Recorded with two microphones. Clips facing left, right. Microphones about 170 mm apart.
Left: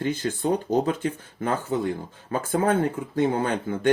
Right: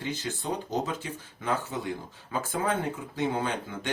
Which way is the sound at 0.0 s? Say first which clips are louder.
Left 8 dB; 50° left (ahead or behind).